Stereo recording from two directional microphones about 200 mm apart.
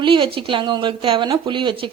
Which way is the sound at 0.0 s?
25° right (ahead or behind).